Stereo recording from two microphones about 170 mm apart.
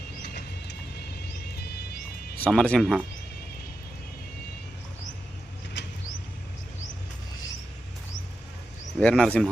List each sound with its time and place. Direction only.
0.2 s music: 70° left (ahead or behind)
2.4 s speech: 5° left (ahead or behind)
5.8 s a sound: 90° left
9.0 s speech: 5° left (ahead or behind)